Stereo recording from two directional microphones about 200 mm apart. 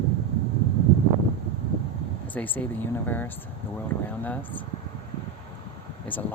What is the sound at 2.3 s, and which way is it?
Speech, 10° left (ahead or behind).